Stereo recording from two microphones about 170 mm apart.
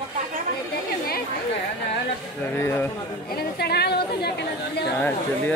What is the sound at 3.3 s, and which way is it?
A woman's voice, 70° left (ahead or behind).